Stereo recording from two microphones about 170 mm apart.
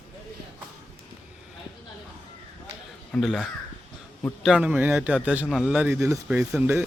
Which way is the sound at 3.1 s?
Centre (ahead or behind).